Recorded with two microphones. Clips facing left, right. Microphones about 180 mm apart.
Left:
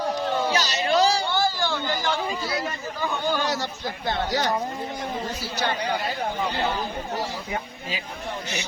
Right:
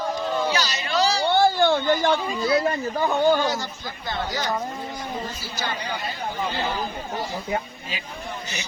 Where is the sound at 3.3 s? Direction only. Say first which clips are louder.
Right 2 dB; 65° left (ahead or behind).